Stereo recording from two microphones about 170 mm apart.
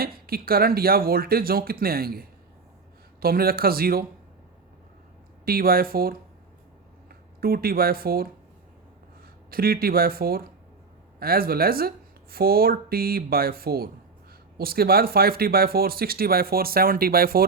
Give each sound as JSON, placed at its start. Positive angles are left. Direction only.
{"t": 0.0, "sound": "speech", "side_deg": -60}
{"t": 5.5, "sound": "speech", "side_deg": -60}
{"t": 7.4, "sound": "speech", "side_deg": -60}
{"t": 9.5, "sound": "speech", "side_deg": -60}